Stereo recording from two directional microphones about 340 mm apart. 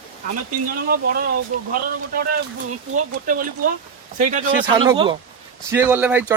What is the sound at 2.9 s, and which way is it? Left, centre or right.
Speech, right.